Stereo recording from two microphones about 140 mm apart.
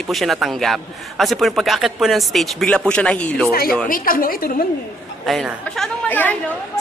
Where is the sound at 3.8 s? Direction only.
90° left.